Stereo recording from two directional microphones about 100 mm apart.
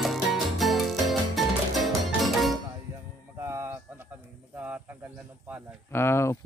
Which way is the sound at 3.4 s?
25° right (ahead or behind).